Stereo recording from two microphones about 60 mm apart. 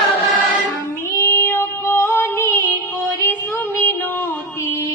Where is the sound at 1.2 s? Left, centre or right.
Left.